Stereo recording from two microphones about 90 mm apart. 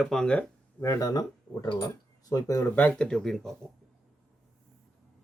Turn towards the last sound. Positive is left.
turn(degrees=5)  # may be behind; listen again after turning